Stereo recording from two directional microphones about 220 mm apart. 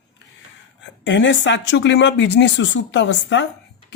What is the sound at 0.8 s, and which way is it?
Speech, 55° left (ahead or behind).